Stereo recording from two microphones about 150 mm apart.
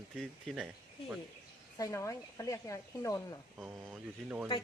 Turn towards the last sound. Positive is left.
turn(degrees=-10)  # may be behind; listen again after turning